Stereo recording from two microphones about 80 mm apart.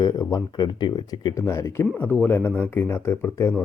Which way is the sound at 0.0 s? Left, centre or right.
Left.